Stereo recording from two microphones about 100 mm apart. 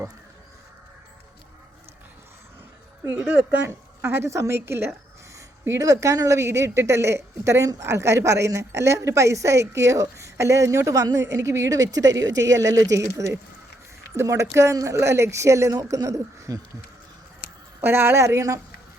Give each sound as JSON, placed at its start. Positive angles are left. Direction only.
{"t": 3.0, "sound": "a woman's voice", "side_deg": -20}
{"t": 17.7, "sound": "a woman's voice", "side_deg": -25}